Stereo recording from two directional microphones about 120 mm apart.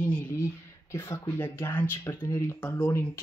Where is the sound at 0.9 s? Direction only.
20° left (ahead or behind).